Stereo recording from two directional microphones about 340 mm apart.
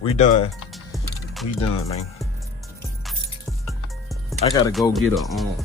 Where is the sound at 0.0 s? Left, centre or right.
Centre.